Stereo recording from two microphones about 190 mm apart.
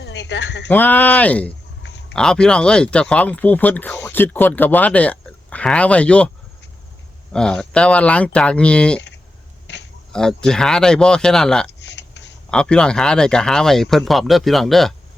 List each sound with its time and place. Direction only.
0.0 s speech: 70° left (ahead or behind)
0.7 s speech: 10° left (ahead or behind)
1.8 s a sound: 70° left (ahead or behind)
2.1 s speech: 5° left (ahead or behind)
7.3 s speech: 5° left (ahead or behind)
9.7 s a sound: 65° left (ahead or behind)
10.1 s speech: 5° left (ahead or behind)
11.8 s a sound: 65° left (ahead or behind)
12.5 s speech: 5° left (ahead or behind)